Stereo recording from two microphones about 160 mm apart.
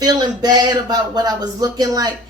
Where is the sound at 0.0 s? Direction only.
25° right (ahead or behind).